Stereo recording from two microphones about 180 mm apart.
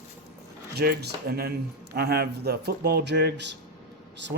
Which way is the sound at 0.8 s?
60° right (ahead or behind).